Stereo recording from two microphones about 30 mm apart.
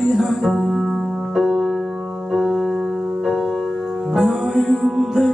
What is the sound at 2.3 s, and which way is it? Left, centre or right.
Keyboard, centre.